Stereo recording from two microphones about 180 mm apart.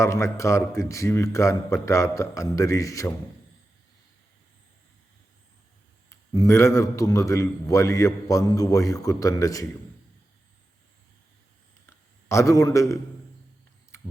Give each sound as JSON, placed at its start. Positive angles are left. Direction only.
{"t": 0.0, "sound": "a man's voice", "side_deg": 15}
{"t": 6.1, "sound": "a man's voice", "side_deg": 15}
{"t": 12.3, "sound": "a man's voice", "side_deg": 15}